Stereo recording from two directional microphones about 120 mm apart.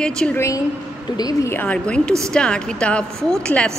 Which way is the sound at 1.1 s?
35° left (ahead or behind).